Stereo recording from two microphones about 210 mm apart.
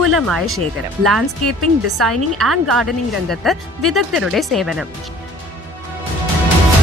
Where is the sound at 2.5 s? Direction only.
Centre (ahead or behind).